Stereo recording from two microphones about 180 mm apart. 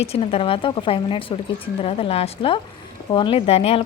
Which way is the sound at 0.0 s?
35° left (ahead or behind).